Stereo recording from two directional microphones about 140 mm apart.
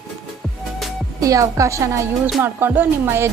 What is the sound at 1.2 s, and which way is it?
Speech, 25° right (ahead or behind).